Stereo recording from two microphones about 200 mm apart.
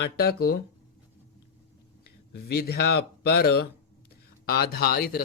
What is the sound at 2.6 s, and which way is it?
Speech, 55° left (ahead or behind).